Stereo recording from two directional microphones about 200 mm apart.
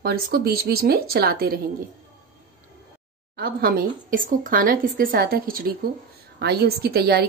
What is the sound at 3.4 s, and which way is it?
A woman's voice, 50° right (ahead or behind).